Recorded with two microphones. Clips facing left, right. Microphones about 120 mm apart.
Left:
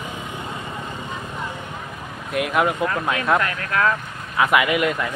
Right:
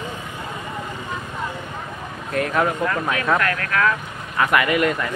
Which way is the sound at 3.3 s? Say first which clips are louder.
Even; 20° left (ahead or behind).